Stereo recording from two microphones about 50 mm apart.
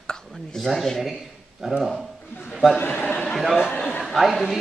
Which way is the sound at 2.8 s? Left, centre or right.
Left.